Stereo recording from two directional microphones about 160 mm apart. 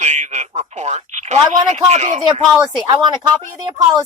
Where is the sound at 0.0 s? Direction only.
45° right (ahead or behind).